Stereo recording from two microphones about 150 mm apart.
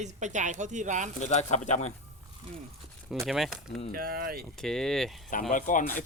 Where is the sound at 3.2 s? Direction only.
Centre (ahead or behind).